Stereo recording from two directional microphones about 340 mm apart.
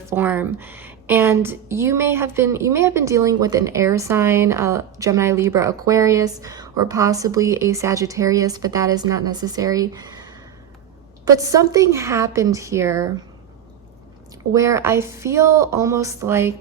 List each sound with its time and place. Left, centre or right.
0.1 s a woman's voice: centre
14.5 s a woman's voice: centre